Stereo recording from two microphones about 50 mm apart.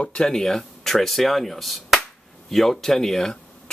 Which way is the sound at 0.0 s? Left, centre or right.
Centre.